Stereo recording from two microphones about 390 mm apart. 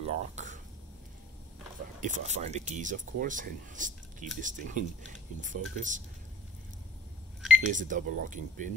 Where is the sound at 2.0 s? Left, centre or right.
Centre.